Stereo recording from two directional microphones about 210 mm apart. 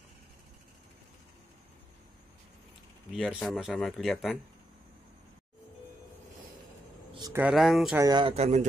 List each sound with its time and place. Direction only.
3.1 s speech: centre (ahead or behind)
7.2 s a sound: 15° right (ahead or behind)
7.4 s speech: centre (ahead or behind)
8.0 s speech: 20° right (ahead or behind)